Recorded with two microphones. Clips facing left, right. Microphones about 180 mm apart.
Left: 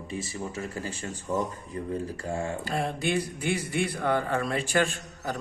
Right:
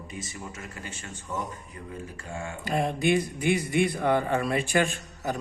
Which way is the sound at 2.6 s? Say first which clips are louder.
Right 3 dB; 15° right (ahead or behind).